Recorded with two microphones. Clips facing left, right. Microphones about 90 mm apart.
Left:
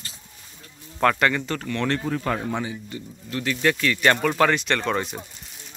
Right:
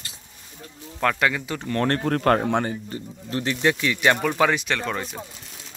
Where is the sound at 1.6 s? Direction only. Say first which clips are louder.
Right 4 dB; 40° right (ahead or behind).